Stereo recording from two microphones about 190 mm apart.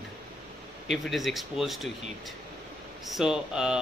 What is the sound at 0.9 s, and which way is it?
Speech, centre (ahead or behind).